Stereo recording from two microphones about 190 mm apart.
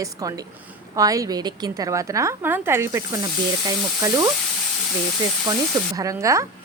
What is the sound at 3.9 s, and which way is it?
Frying, 20° right (ahead or behind).